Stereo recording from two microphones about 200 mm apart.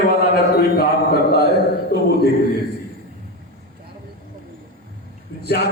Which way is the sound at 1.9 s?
50° left (ahead or behind).